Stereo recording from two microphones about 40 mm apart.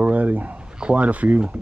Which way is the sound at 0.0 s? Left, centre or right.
Right.